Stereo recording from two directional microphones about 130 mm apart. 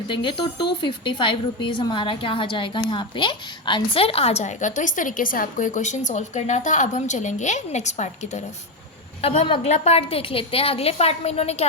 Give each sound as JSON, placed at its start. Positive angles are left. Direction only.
{"t": 0.1, "sound": "a woman's voice", "side_deg": 40}
{"t": 9.2, "sound": "a woman's voice", "side_deg": 45}